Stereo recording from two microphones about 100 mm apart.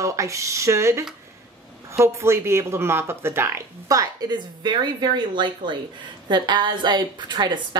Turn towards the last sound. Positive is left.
turn(degrees=-50)  # may be behind; listen again after turning